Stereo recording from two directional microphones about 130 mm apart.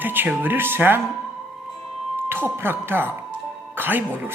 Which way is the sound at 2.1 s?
15° right (ahead or behind).